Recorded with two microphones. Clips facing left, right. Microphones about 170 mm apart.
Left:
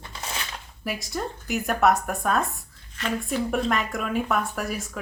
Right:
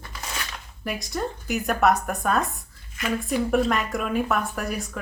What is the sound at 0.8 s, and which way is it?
A woman's voice, centre (ahead or behind).